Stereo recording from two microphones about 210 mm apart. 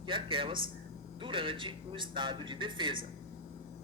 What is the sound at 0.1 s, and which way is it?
Speech, 25° right (ahead or behind).